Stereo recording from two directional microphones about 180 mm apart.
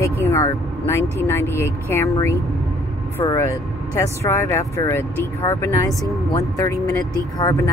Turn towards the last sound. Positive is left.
turn(degrees=20)  # may be behind; listen again after turning